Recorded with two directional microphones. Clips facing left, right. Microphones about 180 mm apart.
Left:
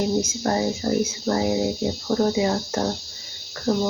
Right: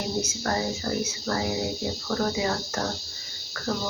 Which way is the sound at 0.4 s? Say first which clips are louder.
Left 4 dB; 25° left (ahead or behind).